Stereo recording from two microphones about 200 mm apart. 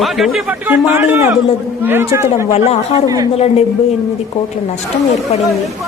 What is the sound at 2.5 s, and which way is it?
Speech, 30° left (ahead or behind).